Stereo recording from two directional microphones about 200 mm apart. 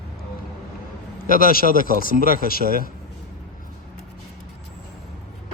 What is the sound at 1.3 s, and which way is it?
A man's voice, 45° left (ahead or behind).